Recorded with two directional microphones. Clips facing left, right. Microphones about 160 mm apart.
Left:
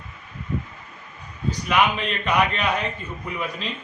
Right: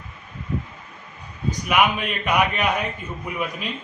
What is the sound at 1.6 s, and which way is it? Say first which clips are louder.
A man's voice: right 1 dB; 10° right (ahead or behind).